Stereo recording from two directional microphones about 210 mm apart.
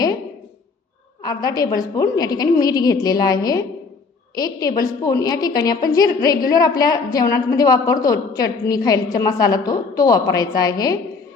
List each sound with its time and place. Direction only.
1.2 s a woman's voice: 20° left (ahead or behind)